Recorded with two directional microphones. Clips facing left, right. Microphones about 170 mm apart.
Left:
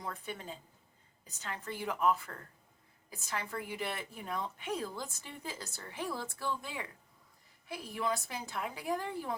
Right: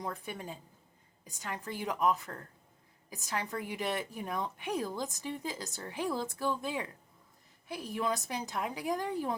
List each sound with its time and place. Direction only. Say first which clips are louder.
0.0 s a woman's voice: right 3 dB; 15° right (ahead or behind)